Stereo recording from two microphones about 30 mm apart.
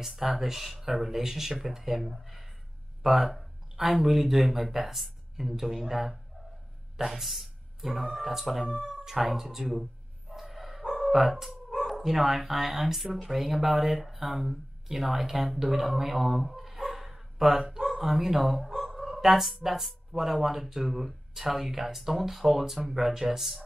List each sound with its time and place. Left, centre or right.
0.0 s speech: centre
3.0 s speech: centre
10.3 s bow-wow: centre
10.9 s speech: centre